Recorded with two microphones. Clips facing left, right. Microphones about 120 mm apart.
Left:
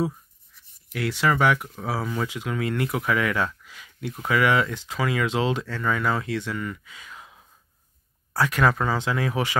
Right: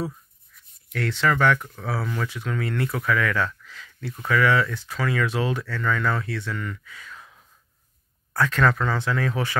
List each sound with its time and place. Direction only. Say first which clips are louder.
0.9 s speech: even; 10° left (ahead or behind)